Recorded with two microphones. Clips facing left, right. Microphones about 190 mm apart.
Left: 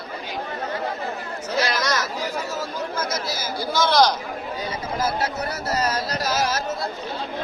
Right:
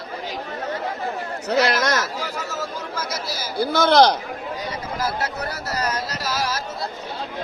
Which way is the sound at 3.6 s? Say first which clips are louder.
Right 4 dB; 60° right (ahead or behind).